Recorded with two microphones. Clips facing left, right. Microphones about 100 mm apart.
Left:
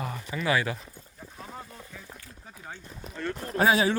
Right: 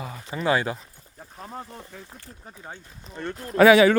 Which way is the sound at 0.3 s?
30° right (ahead or behind).